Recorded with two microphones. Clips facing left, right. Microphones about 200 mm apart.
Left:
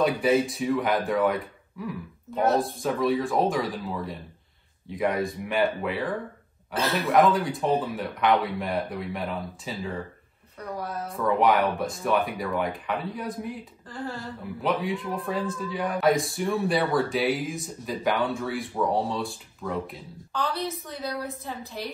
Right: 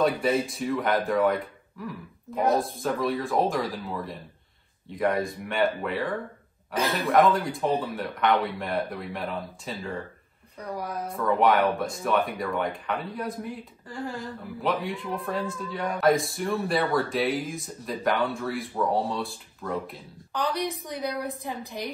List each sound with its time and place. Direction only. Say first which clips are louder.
0.0 s a man's voice: left 2 dB; centre (ahead or behind)
10.8 s a woman's voice: even; 10° right (ahead or behind)
11.1 s a man's voice: even; centre (ahead or behind)
13.8 s a woman's voice: right 1 dB; 15° right (ahead or behind)
14.2 s a man's voice: left 1 dB; centre (ahead or behind)
20.3 s a woman's voice: right 1 dB; 15° right (ahead or behind)